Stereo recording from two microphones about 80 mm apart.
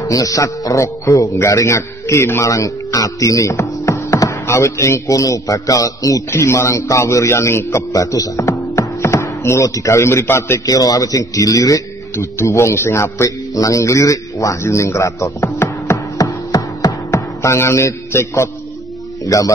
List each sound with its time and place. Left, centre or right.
0.1 s a man's voice: left
8.5 s a sound: left
10.6 s a man's voice: left
15.4 s music: left
16.2 s a sound: left
19.2 s speech: left